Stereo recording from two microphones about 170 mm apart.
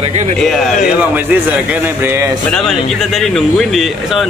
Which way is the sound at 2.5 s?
Centre (ahead or behind).